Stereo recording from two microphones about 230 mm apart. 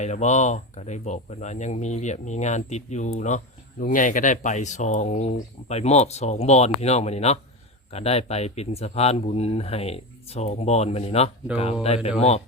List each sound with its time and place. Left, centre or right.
0.0 s speech: left